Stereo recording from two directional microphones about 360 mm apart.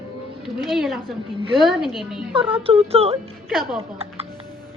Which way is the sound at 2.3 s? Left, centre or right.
Centre.